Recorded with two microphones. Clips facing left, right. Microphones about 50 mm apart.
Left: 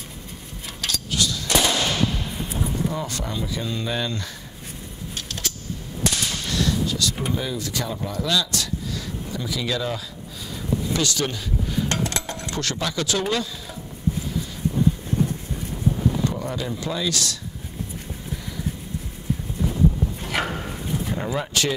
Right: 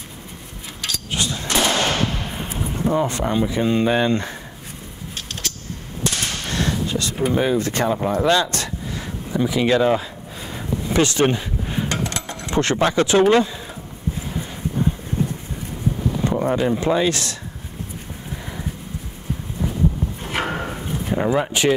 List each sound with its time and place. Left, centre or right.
1.1 s machine gun: right
6.1 s gunshot: right
7.3 s a sound: right
16.3 s speech: right
20.2 s dog: right